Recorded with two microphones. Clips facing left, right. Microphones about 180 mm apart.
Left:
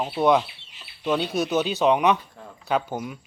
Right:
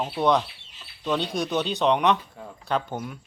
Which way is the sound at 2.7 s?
5° left (ahead or behind).